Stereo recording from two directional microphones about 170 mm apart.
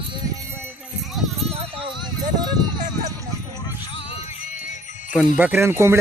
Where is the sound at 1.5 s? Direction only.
35° right (ahead or behind).